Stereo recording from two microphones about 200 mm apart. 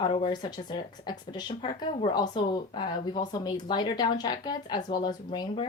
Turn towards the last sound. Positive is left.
turn(degrees=20)  # may be behind; listen again after turning